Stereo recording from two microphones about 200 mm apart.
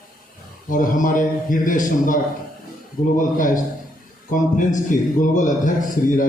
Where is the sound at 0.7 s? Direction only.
40° left (ahead or behind).